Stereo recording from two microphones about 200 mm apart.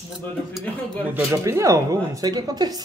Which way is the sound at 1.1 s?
15° right (ahead or behind).